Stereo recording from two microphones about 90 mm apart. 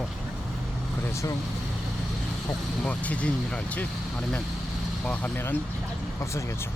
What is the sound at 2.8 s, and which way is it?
Speech, 15° left (ahead or behind).